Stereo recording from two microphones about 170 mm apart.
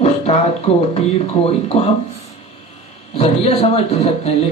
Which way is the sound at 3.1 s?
35° left (ahead or behind).